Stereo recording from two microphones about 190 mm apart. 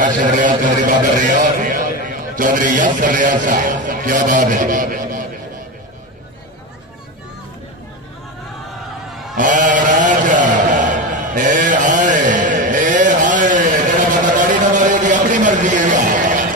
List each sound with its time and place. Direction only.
0.0 s a man's voice: 45° right (ahead or behind)
9.1 s a sound: centre (ahead or behind)
9.4 s mantra: 45° right (ahead or behind)